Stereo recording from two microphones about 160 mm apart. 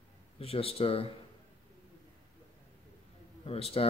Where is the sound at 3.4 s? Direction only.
40° left (ahead or behind).